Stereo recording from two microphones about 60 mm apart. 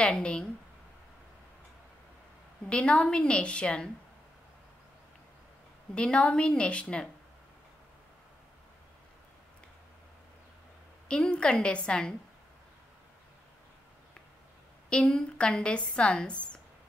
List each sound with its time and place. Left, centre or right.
0.0 s a woman's voice: centre
2.6 s speech: centre
5.9 s speech: centre
11.1 s speech: centre
14.9 s speech: centre